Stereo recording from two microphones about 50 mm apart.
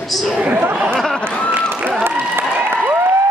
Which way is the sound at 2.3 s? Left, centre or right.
Right.